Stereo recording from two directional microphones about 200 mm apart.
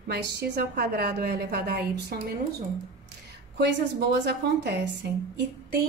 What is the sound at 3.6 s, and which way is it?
A woman's voice, 60° right (ahead or behind).